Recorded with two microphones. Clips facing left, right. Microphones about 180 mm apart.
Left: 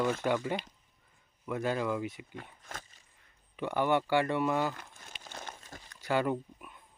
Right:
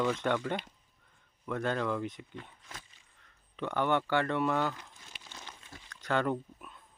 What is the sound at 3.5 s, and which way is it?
Speech, 10° left (ahead or behind).